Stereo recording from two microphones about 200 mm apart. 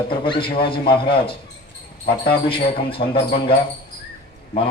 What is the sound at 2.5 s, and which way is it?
Speech, 25° left (ahead or behind).